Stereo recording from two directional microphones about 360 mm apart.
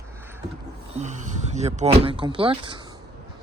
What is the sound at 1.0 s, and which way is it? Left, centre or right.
Speech, centre.